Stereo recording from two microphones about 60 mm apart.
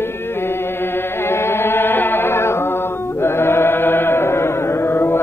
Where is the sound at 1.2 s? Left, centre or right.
Left.